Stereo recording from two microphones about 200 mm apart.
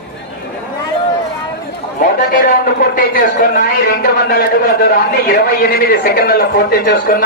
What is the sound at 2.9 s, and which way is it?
A man's voice, 45° left (ahead or behind).